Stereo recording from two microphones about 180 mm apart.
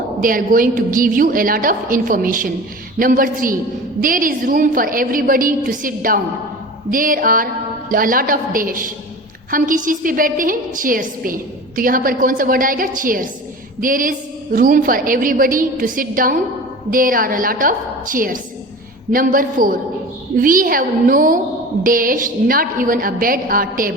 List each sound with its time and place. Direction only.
0.2 s a woman's voice: 50° right (ahead or behind)